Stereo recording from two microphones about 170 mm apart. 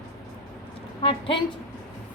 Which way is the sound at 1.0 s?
30° left (ahead or behind).